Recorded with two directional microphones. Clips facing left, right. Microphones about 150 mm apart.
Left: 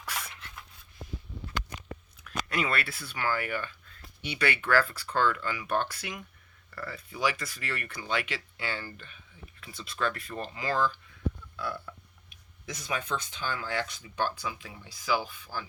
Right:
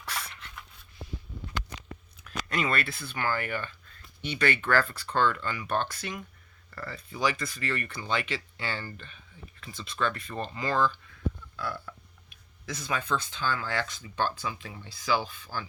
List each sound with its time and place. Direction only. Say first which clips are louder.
0.1 s a sound: right 1 dB; 10° left (ahead or behind)
2.5 s speech: right 2 dB; 5° left (ahead or behind)
11.5 s burping: even; 15° left (ahead or behind)
12.6 s speech: right 2 dB; 15° left (ahead or behind)